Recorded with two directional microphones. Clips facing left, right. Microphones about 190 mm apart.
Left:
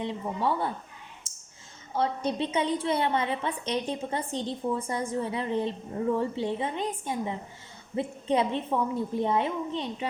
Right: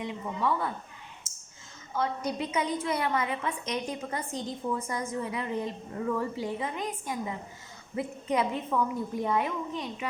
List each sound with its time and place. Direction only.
0.0 s speech: 30° left (ahead or behind)
1.2 s a sound: 30° left (ahead or behind)
1.9 s a woman's voice: 30° left (ahead or behind)